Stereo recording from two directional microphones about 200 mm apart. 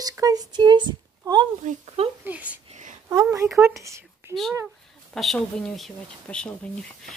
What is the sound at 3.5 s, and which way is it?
Speech, 15° right (ahead or behind).